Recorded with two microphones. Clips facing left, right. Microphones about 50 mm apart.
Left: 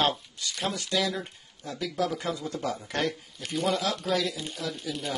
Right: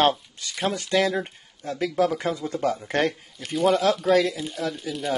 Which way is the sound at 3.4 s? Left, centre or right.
Centre.